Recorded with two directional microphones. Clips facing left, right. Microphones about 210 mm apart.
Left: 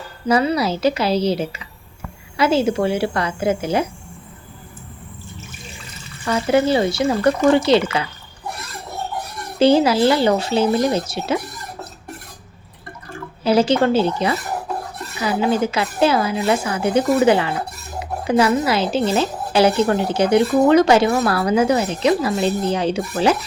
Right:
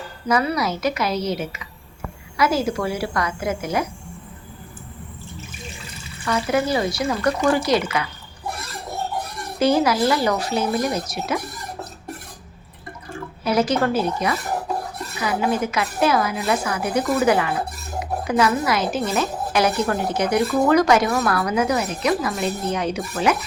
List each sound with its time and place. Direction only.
0.3 s a woman's voice: 30° left (ahead or behind)
6.2 s a woman's voice: 30° left (ahead or behind)
9.6 s a woman's voice: 30° left (ahead or behind)
13.4 s a woman's voice: 30° left (ahead or behind)